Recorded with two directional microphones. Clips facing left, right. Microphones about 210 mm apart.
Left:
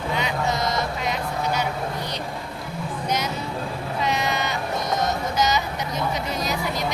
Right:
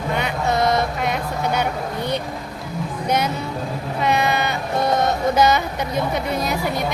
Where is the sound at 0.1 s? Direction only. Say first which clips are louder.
Right 3 dB; 55° right (ahead or behind).